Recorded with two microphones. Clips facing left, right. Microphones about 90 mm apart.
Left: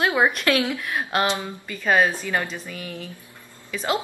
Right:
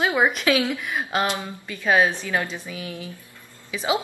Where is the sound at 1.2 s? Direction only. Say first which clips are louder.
Left 1 dB; 20° left (ahead or behind).